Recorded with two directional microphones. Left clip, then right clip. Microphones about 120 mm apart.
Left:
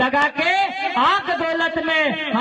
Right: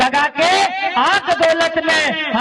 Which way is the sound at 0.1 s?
25° right (ahead or behind).